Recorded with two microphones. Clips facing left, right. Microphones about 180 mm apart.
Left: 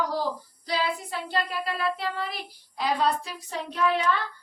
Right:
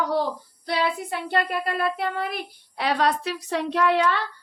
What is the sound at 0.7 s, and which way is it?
Child singing, 60° right (ahead or behind).